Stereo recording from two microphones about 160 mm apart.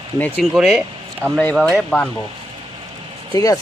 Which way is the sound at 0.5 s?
Centre (ahead or behind).